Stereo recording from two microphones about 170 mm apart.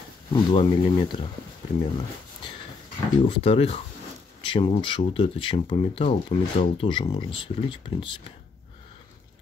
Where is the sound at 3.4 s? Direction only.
35° left (ahead or behind).